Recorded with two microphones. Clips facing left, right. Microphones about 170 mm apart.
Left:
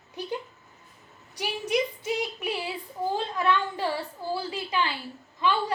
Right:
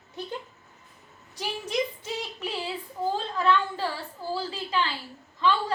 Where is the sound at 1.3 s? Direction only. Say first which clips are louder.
Left 2 dB; 15° left (ahead or behind).